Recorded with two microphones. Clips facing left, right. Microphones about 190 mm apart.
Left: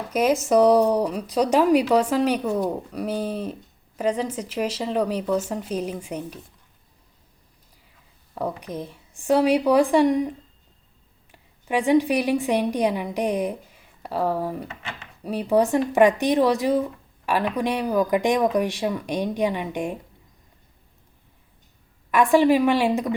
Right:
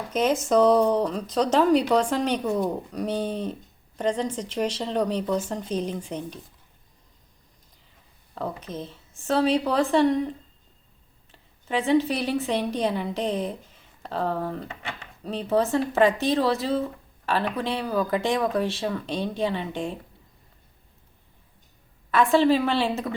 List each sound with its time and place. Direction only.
0.1 s speech: 10° left (ahead or behind)
8.4 s a woman's voice: 15° left (ahead or behind)
14.7 s speech: 35° right (ahead or behind)
15.2 s speech: 10° left (ahead or behind)
22.1 s speech: 15° left (ahead or behind)